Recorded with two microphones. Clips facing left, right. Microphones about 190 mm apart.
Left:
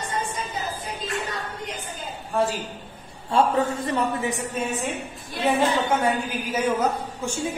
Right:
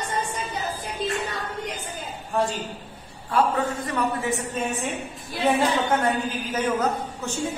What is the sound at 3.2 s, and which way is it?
A man's voice, 25° left (ahead or behind).